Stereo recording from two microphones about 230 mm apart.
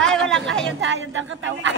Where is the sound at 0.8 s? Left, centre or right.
Right.